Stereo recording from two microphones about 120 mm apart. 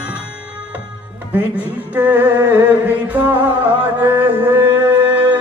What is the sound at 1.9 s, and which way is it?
Music, 15° right (ahead or behind).